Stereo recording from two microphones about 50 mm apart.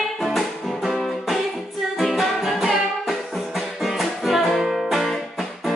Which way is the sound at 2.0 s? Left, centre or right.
Centre.